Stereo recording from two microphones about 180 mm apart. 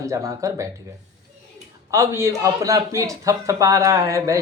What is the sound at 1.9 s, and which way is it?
Speech, 15° right (ahead or behind).